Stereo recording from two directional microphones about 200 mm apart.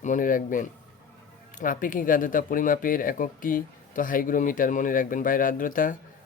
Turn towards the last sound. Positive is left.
turn(degrees=45)  # may be behind; listen again after turning